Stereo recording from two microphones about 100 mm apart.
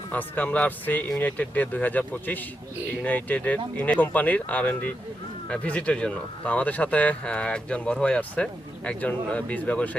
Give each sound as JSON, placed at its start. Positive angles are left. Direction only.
{"t": 0.1, "sound": "speech", "side_deg": 15}